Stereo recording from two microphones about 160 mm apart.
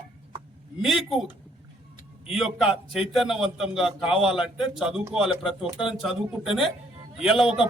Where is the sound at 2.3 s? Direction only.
5° right (ahead or behind).